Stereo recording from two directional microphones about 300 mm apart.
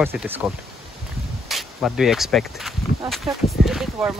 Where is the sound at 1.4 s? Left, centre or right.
Centre.